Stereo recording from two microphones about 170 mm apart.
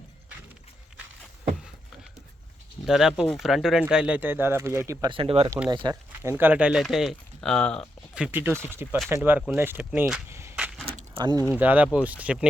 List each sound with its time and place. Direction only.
2.8 s speech: centre (ahead or behind)
5.0 s speech: 30° right (ahead or behind)
6.2 s speech: 10° right (ahead or behind)
8.1 s speech: 10° right (ahead or behind)
10.5 s a sound: 5° right (ahead or behind)
10.8 s keys jangling: 30° right (ahead or behind)
11.5 s speech: 10° right (ahead or behind)